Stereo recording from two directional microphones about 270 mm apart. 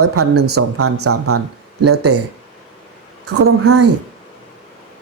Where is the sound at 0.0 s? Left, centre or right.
Right.